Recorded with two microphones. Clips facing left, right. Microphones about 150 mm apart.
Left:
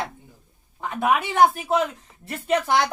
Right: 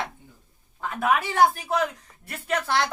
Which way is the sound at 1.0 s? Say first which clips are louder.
Left 2 dB; 20° left (ahead or behind).